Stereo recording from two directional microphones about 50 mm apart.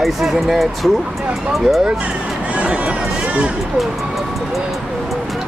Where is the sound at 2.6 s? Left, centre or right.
Right.